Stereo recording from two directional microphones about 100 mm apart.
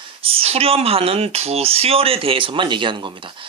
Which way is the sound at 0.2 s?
70° right (ahead or behind).